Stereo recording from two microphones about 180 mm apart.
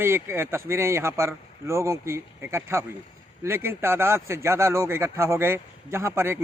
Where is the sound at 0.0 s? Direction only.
15° right (ahead or behind).